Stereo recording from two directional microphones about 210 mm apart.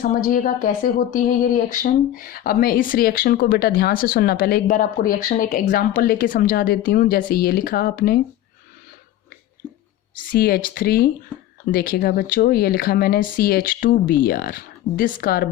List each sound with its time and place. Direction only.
0.0 s speech: 40° left (ahead or behind)
10.2 s speech: 45° left (ahead or behind)